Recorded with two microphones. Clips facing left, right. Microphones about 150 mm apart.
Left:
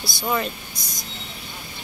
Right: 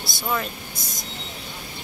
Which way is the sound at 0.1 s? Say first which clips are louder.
Left 2 dB; centre (ahead or behind).